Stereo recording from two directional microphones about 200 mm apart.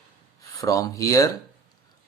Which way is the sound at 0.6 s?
15° left (ahead or behind).